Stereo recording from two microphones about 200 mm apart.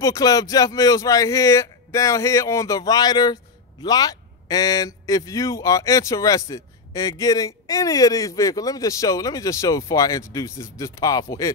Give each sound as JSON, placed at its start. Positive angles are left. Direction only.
{"t": 0.0, "sound": "speech", "side_deg": 15}